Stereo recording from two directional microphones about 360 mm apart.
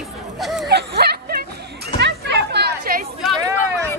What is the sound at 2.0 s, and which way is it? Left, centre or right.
Chatter, right.